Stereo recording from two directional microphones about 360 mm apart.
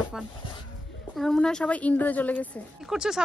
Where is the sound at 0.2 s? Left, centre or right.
Centre.